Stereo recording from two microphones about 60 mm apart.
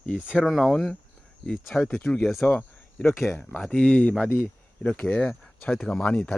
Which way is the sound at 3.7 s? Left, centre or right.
Left.